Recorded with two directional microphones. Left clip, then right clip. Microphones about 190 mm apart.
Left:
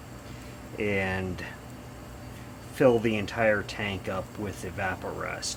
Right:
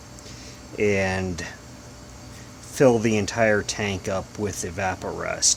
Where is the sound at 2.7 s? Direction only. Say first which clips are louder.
Right 4 dB; 55° right (ahead or behind).